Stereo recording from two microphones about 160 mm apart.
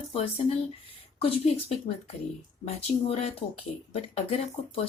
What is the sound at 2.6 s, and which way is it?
Speech, 45° left (ahead or behind).